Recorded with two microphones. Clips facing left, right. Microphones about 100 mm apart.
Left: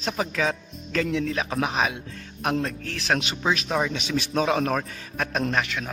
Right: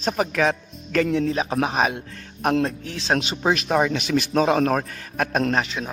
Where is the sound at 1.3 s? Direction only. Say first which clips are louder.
Right 3 dB; 30° right (ahead or behind).